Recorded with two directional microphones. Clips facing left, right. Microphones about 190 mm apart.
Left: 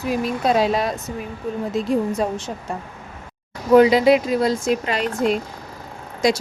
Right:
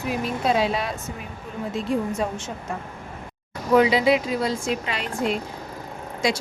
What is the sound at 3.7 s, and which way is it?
Speech, 45° left (ahead or behind).